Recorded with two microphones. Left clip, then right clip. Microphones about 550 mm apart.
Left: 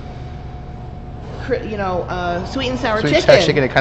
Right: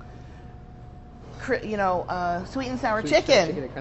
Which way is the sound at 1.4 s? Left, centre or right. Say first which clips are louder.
Left 4 dB; right.